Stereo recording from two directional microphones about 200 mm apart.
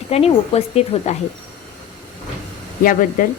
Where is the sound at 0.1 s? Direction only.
30° left (ahead or behind).